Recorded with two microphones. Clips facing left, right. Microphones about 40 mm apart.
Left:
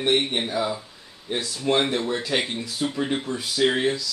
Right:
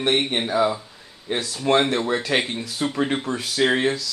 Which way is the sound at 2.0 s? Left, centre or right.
Right.